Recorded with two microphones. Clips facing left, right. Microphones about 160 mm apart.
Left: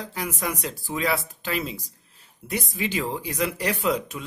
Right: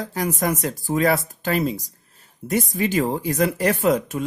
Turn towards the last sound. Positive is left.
turn(degrees=-45)  # may be behind; listen again after turning